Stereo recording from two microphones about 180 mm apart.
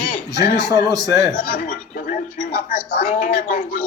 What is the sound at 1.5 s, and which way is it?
Speech, 50° left (ahead or behind).